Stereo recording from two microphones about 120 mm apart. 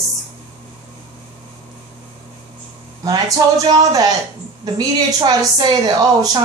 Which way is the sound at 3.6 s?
30° right (ahead or behind).